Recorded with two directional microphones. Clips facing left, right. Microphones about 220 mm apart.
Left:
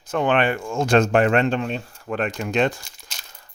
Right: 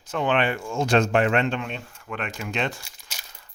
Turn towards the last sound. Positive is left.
turn(degrees=-10)  # may be behind; listen again after turning